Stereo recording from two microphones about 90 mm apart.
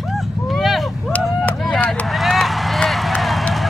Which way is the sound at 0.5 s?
Centre (ahead or behind).